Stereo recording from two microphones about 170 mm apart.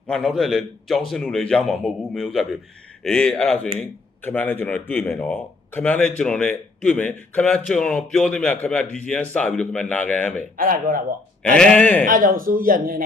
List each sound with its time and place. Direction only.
0.1 s a man's voice: centre (ahead or behind)
10.6 s speech: 55° right (ahead or behind)
11.4 s speech: 5° left (ahead or behind)
12.0 s speech: 55° right (ahead or behind)